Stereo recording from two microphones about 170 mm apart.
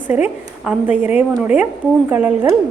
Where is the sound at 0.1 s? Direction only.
10° right (ahead or behind).